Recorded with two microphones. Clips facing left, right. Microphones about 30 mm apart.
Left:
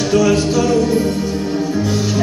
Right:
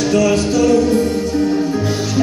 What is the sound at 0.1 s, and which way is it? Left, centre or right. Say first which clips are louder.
Music: left 2 dB; centre.